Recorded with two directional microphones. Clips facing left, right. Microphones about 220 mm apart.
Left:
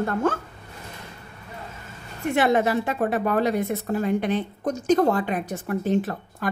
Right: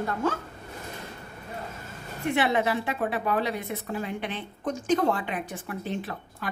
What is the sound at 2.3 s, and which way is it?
A woman's voice, 45° left (ahead or behind).